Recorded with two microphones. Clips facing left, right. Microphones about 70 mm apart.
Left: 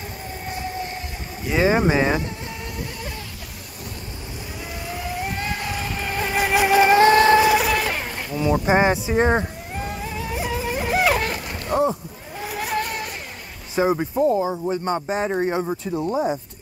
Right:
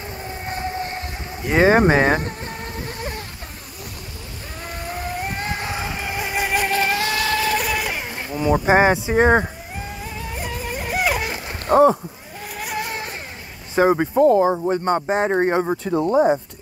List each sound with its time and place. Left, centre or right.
0.5 s vehicle: right
4.8 s vehicle: right
5.4 s music: right; by 6.8 s centre
6.8 s vehicle: left
7.5 s a sound: centre
8.2 s insect: right
8.6 s speech: right
9.8 s music: centre
11.6 s speech: right
12.4 s vehicle: centre
12.8 s vehicle: right
13.7 s speech: right